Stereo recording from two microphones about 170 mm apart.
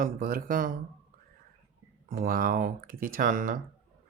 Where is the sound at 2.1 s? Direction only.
60° right (ahead or behind).